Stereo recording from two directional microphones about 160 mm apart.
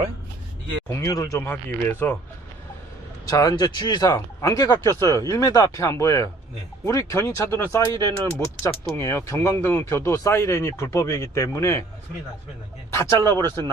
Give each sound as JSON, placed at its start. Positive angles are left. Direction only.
{"t": 0.9, "sound": "speech", "side_deg": 20}
{"t": 3.2, "sound": "speech", "side_deg": 20}
{"t": 12.9, "sound": "speech", "side_deg": 20}